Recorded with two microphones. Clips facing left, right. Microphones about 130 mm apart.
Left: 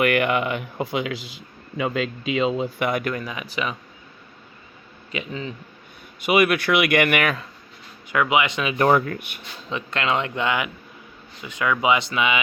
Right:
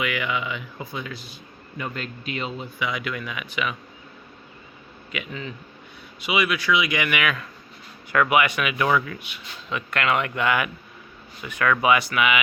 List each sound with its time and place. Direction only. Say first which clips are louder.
0.0 s a man's voice: left 7 dB; 60° left (ahead or behind); by 2.0 s 90° left
2.6 s speech: left 5 dB; 60° left (ahead or behind); by 3.8 s 35° left (ahead or behind)
5.1 s speech: left 3 dB; 30° left (ahead or behind)
6.1 s speech: left 6 dB; 50° left (ahead or behind)
8.1 s speech: even; 20° left (ahead or behind)
8.8 s speech: left 5 dB; 45° left (ahead or behind)
9.6 s speech: even; 30° left (ahead or behind)